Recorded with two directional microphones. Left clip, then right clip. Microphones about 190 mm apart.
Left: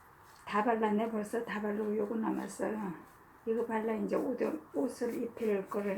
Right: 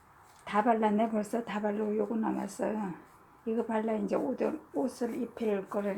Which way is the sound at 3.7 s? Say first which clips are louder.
Right 2 dB; 40° right (ahead or behind).